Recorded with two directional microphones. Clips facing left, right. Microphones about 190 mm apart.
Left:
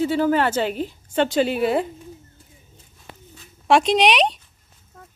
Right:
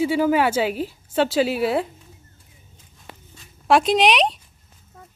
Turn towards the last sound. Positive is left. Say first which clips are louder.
# even
turn(degrees=0)  # may be behind; listen again after turning